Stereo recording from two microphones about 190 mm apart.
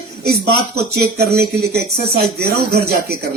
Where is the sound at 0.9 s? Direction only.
60° right (ahead or behind).